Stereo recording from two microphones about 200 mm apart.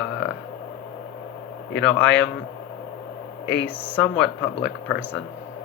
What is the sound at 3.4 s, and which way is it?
Speech, 60° left (ahead or behind).